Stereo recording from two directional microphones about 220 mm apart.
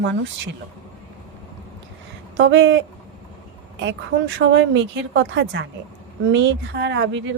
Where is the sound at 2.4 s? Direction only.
55° right (ahead or behind).